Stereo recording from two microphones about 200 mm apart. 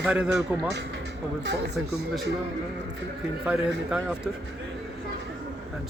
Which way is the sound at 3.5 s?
5° right (ahead or behind).